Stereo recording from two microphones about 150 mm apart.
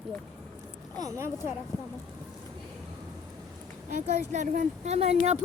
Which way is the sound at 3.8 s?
50° right (ahead or behind).